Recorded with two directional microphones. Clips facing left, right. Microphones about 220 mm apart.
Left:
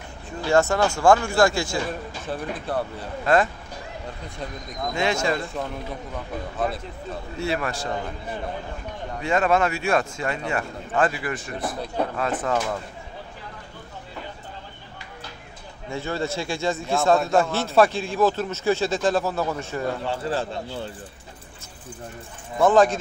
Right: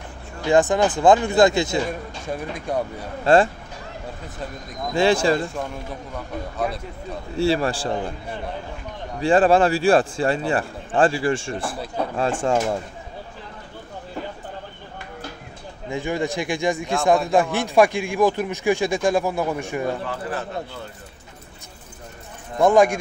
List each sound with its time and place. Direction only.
0.4 s speech: 15° right (ahead or behind)
3.3 s speech: 30° right (ahead or behind)
4.9 s a man's voice: 30° right (ahead or behind)
7.3 s a man's voice: 30° right (ahead or behind)
9.2 s a man's voice: 30° right (ahead or behind)
15.9 s speech: 15° right (ahead or behind)
20.1 s speech: 30° left (ahead or behind)
22.6 s speech: 15° right (ahead or behind)